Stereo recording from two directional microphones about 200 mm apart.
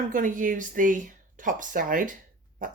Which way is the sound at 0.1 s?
40° right (ahead or behind).